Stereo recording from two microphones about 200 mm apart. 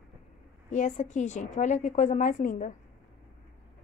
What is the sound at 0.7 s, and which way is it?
A woman's voice, 35° left (ahead or behind).